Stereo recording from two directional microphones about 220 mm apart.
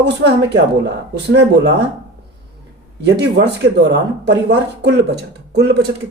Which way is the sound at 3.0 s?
50° right (ahead or behind).